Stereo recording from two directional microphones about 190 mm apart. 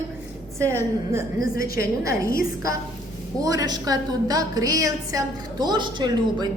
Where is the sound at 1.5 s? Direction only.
50° left (ahead or behind).